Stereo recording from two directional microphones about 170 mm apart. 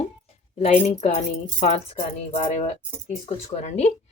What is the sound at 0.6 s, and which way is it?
Speech, 40° left (ahead or behind).